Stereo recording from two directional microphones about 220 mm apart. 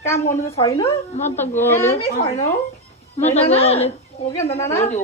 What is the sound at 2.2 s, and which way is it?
Speech, 30° left (ahead or behind).